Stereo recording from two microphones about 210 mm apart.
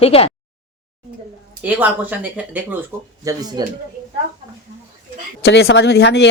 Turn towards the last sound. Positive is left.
turn(degrees=55)  # may be behind; listen again after turning